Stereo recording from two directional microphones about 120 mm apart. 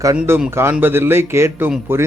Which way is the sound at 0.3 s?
20° right (ahead or behind).